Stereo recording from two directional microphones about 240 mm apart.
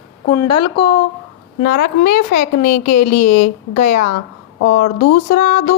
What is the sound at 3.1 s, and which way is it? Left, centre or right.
Speech, left.